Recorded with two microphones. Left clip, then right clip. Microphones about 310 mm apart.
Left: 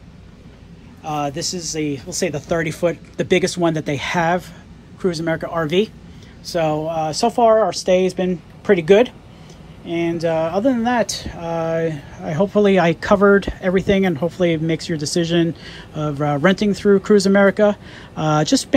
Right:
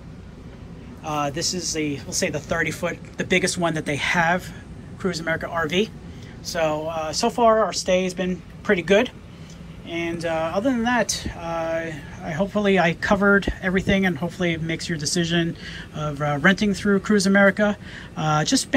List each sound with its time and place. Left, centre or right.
1.0 s speech: centre